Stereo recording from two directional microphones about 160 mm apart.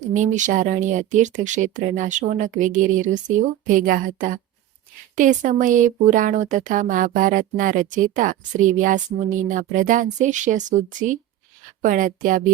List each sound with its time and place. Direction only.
0.0 s a woman's voice: 50° right (ahead or behind)